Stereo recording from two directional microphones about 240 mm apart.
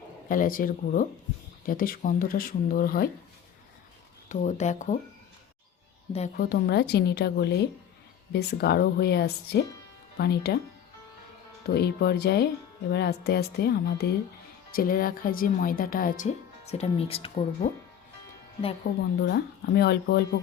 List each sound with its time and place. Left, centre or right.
0.3 s speech: left
4.3 s speech: left
6.3 s speech: left
11.6 s speech: left
18.9 s speech: left